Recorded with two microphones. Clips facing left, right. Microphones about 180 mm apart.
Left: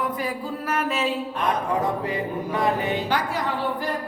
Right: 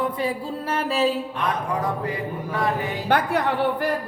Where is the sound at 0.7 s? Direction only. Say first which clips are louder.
Right 3 dB; 30° right (ahead or behind).